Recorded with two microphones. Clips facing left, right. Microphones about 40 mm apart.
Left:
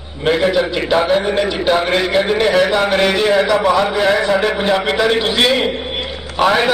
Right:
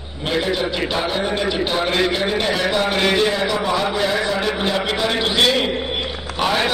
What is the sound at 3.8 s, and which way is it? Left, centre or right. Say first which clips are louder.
A man's voice: left 5 dB; left.